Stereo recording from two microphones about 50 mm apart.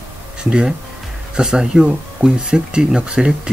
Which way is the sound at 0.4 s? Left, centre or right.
Centre.